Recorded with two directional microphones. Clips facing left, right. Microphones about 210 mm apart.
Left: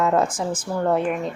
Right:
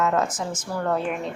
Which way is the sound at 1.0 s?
Centre (ahead or behind).